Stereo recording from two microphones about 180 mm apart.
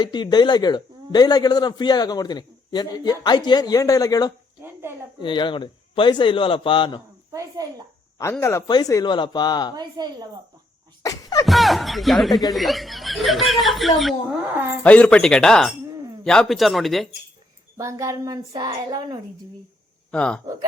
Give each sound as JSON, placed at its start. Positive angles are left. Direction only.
{"t": 0.0, "sound": "a man's voice", "side_deg": 25}
{"t": 4.6, "sound": "a sound", "side_deg": -15}
{"t": 5.2, "sound": "a man's voice", "side_deg": 25}
{"t": 7.3, "sound": "speech", "side_deg": -20}
{"t": 8.2, "sound": "a man's voice", "side_deg": 15}
{"t": 9.7, "sound": "speech", "side_deg": -20}
{"t": 11.0, "sound": "a sound", "side_deg": 20}
{"t": 11.4, "sound": "speech", "side_deg": 0}
{"t": 17.7, "sound": "speech", "side_deg": -15}
{"t": 20.1, "sound": "a man's voice", "side_deg": 5}